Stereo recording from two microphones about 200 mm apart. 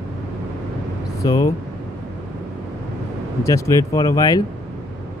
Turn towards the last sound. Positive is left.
turn(degrees=20)  # may be behind; listen again after turning